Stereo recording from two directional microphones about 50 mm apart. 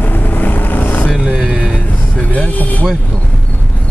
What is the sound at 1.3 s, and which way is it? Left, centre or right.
Vehicle, centre.